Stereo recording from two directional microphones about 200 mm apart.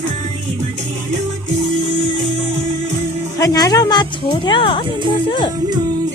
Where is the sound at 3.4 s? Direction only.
20° left (ahead or behind).